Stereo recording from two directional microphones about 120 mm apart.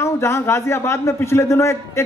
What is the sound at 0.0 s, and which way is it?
A man's voice, 20° left (ahead or behind).